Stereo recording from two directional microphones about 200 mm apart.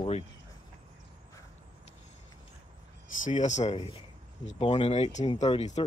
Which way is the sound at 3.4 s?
35° left (ahead or behind).